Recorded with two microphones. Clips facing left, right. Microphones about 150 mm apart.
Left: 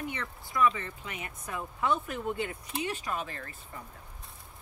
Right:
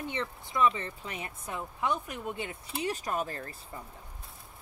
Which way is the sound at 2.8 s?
40° right (ahead or behind).